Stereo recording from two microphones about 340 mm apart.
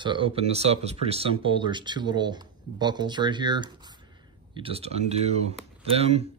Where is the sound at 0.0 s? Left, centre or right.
Centre.